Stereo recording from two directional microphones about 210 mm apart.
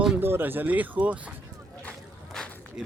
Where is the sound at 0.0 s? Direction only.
5° right (ahead or behind).